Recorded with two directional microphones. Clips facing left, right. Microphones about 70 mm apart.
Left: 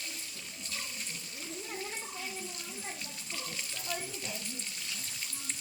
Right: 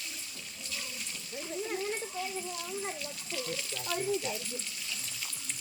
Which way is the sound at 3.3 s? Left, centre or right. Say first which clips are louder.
Right 5 dB; left.